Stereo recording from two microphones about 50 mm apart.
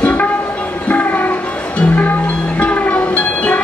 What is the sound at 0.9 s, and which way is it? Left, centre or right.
Music, left.